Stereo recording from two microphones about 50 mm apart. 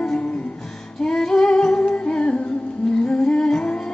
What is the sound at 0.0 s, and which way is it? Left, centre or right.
Music, centre.